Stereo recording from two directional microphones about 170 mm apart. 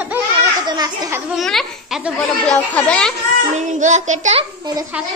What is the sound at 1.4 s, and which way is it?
Speech, centre (ahead or behind).